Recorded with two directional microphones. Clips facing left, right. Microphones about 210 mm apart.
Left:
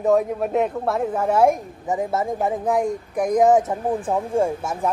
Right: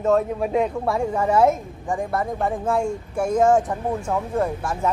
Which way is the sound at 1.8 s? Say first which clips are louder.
Left 2 dB; 20° left (ahead or behind).